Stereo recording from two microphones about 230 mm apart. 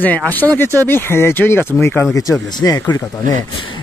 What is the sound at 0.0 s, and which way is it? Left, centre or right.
Speech, centre.